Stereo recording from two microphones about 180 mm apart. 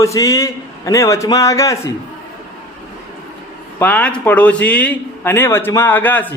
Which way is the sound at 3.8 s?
10° left (ahead or behind).